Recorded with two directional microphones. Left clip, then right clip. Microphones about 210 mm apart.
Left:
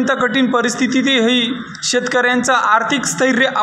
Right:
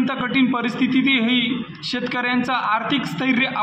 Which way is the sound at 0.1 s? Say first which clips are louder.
Left 6 dB; 20° left (ahead or behind).